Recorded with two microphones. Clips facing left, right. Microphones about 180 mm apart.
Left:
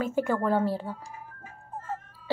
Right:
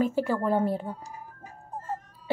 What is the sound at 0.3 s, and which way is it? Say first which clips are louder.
Speech: even; 15° right (ahead or behind).